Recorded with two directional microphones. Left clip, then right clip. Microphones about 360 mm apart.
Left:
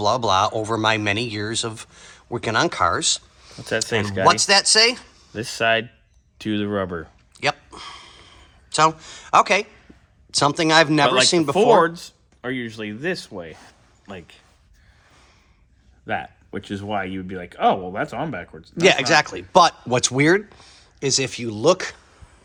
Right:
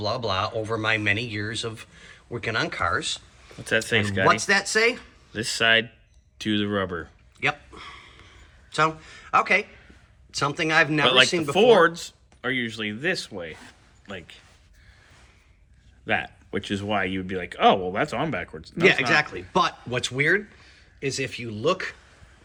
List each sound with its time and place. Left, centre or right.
0.0 s speech: centre
3.6 s speech: left
4.3 s speech: centre
5.3 s speech: left
7.3 s a sound: centre
10.3 s speech: centre
11.5 s speech: left
16.0 s speech: centre